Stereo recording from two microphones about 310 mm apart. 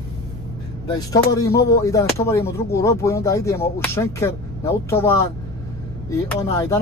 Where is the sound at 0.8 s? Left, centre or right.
Centre.